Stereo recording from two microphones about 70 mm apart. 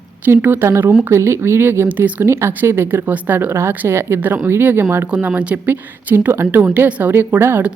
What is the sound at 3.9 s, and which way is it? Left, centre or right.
Speech, right.